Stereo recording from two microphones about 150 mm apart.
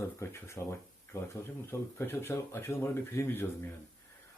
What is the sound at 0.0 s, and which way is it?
Speech, 20° left (ahead or behind).